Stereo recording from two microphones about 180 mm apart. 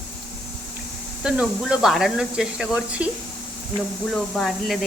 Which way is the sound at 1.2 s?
5° right (ahead or behind).